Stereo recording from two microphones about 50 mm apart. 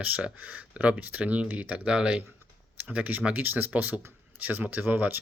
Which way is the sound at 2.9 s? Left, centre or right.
Right.